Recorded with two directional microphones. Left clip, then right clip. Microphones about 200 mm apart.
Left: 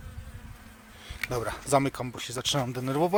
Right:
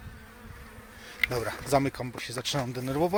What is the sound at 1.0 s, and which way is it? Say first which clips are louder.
Speech: right 3 dB; centre (ahead or behind).